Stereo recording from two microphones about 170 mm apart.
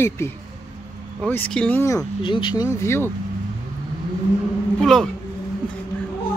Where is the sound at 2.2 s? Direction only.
30° left (ahead or behind).